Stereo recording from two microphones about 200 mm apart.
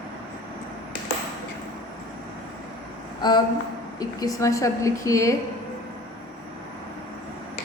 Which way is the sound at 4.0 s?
20° left (ahead or behind).